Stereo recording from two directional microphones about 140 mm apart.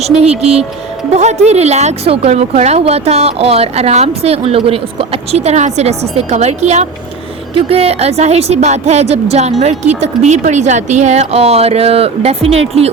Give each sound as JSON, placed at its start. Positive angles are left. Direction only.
{"t": 0.2, "sound": "speech", "side_deg": -45}